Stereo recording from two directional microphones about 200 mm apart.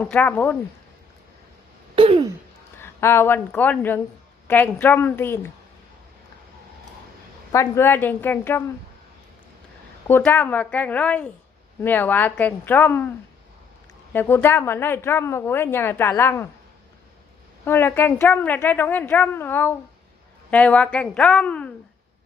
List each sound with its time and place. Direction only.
0.0 s a woman's voice: 10° left (ahead or behind)
2.0 s a sound: 25° right (ahead or behind)
2.8 s a woman's voice: 10° left (ahead or behind)
7.5 s a woman's voice: 15° left (ahead or behind)
10.1 s a woman's voice: 10° left (ahead or behind)
14.1 s a woman's voice: 10° left (ahead or behind)
17.7 s a woman's voice: 10° left (ahead or behind)